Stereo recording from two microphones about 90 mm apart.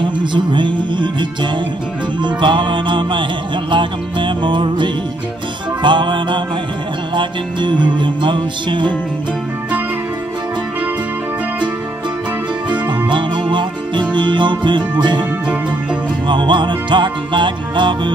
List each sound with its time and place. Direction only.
0.0 s music: 60° right (ahead or behind)
12.7 s music: 60° right (ahead or behind)
16.3 s music: 60° right (ahead or behind)